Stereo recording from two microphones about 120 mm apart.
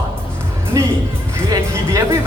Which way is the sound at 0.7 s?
30° right (ahead or behind).